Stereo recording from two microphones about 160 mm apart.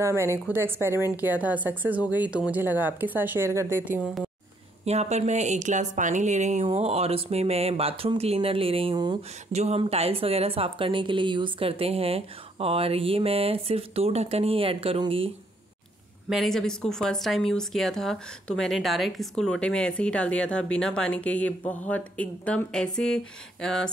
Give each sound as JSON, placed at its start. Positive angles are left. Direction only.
{"t": 0.0, "sound": "a woman's voice", "side_deg": -15}
{"t": 4.8, "sound": "a woman's voice", "side_deg": -45}
{"t": 9.5, "sound": "a woman's voice", "side_deg": -40}
{"t": 16.3, "sound": "speech", "side_deg": 0}